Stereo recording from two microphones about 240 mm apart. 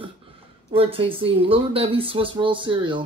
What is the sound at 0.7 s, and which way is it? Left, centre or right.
Speech, right.